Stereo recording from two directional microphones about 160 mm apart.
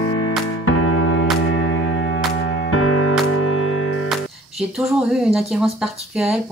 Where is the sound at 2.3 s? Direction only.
90° left.